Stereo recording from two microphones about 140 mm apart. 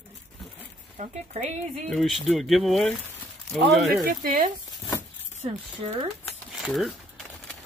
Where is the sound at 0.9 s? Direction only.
55° right (ahead or behind).